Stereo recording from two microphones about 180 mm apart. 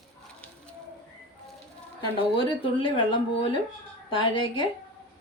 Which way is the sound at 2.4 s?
25° left (ahead or behind).